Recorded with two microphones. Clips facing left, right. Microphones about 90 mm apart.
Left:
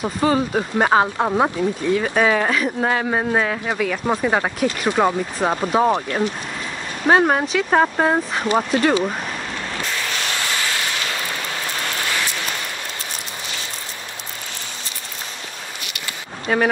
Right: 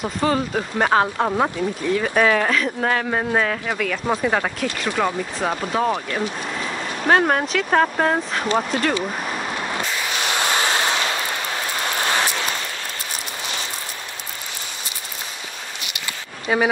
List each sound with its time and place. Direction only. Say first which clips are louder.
0.2 s speech: left 2 dB; 10° left (ahead or behind)
7.1 s speech: left 2 dB; 10° left (ahead or behind)
10.2 s a sound: right 7 dB; 20° right (ahead or behind)
16.5 s speech: left 1 dB; 5° right (ahead or behind)